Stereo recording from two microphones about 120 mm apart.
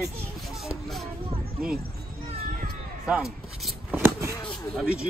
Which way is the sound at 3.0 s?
5° right (ahead or behind).